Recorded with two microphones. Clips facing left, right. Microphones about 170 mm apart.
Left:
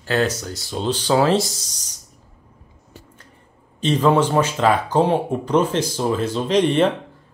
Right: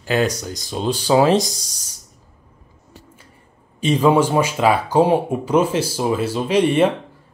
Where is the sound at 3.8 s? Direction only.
10° right (ahead or behind).